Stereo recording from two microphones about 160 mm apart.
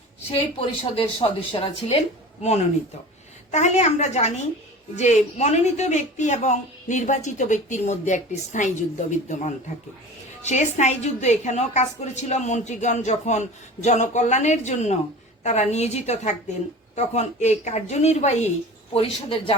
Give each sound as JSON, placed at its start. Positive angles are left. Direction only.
{"t": 0.3, "sound": "speech", "side_deg": 35}
{"t": 3.5, "sound": "a woman's voice", "side_deg": 45}